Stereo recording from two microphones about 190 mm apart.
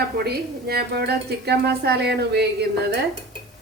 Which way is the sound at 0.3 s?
55° right (ahead or behind).